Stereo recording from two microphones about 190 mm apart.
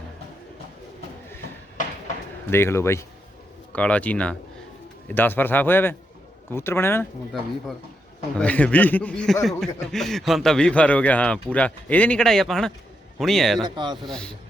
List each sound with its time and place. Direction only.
2.5 s a man's voice: 15° left (ahead or behind)
8.4 s a man's voice: 5° left (ahead or behind)
13.6 s speech: 25° right (ahead or behind)
14.1 s a man's voice: 5° left (ahead or behind)